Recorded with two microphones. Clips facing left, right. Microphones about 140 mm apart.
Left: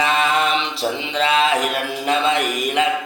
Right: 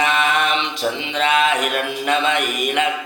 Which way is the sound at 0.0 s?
30° left (ahead or behind).